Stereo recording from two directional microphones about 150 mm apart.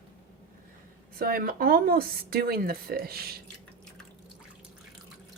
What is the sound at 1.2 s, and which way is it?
Speech, 75° right (ahead or behind).